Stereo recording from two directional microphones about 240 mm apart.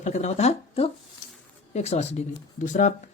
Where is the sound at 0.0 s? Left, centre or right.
Left.